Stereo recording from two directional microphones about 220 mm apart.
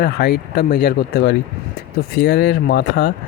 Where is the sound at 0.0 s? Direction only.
45° left (ahead or behind).